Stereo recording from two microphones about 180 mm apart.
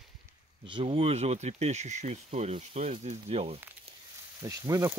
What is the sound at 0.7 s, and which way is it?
Speech, 30° right (ahead or behind).